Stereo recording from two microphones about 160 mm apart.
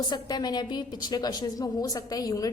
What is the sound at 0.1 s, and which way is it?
A woman's voice, 25° left (ahead or behind).